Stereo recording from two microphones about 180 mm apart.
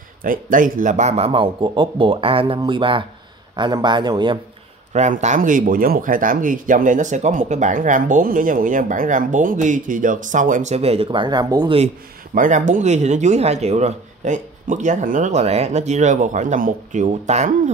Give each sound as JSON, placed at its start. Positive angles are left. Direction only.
{"t": 0.2, "sound": "speech", "side_deg": -50}
{"t": 4.9, "sound": "speech", "side_deg": -40}
{"t": 12.4, "sound": "speech", "side_deg": -45}